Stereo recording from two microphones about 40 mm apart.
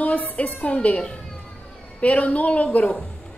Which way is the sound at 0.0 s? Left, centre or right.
Left.